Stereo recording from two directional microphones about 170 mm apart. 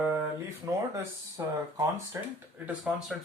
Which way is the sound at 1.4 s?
20° right (ahead or behind).